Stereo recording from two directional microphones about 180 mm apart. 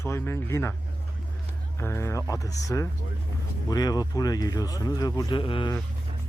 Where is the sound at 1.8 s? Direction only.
15° left (ahead or behind).